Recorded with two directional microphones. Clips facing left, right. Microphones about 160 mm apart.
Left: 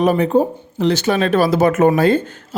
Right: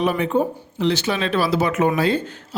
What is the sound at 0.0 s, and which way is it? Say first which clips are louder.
A man's voice: left 5 dB; 40° left (ahead or behind).